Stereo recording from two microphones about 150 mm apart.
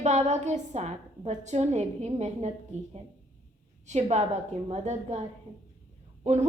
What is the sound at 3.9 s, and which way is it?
A woman's voice, 50° right (ahead or behind).